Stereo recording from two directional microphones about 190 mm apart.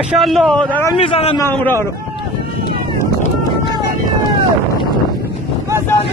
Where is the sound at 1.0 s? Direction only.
30° left (ahead or behind).